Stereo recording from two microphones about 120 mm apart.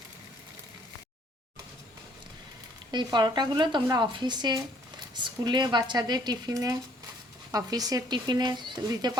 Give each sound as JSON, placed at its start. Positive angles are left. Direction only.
{"t": 2.9, "sound": "speech", "side_deg": -40}